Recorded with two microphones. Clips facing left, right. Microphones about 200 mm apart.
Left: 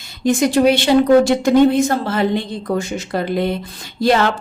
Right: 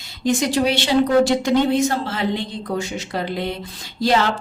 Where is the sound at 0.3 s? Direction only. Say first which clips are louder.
Left 5 dB; 55° left (ahead or behind).